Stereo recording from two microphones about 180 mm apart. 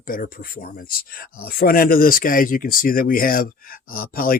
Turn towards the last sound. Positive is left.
turn(degrees=55)  # may be behind; listen again after turning